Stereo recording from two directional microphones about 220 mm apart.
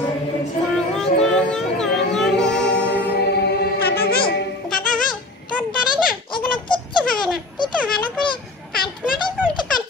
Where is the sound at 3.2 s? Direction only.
45° left (ahead or behind).